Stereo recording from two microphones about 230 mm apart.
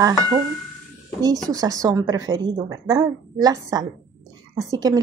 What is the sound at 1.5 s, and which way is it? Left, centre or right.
A woman's voice, centre.